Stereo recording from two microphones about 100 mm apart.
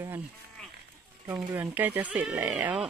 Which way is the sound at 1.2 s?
20° right (ahead or behind).